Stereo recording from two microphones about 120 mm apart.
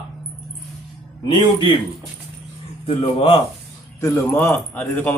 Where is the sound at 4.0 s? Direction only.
20° left (ahead or behind).